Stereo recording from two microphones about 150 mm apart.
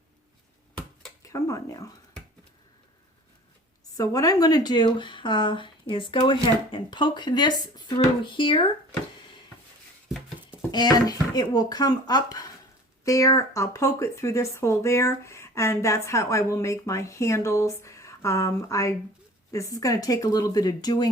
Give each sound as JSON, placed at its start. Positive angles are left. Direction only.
{"t": 1.2, "sound": "speech", "side_deg": 20}
{"t": 3.9, "sound": "speech", "side_deg": 25}
{"t": 10.1, "sound": "a sound", "side_deg": 0}
{"t": 10.7, "sound": "speech", "side_deg": 30}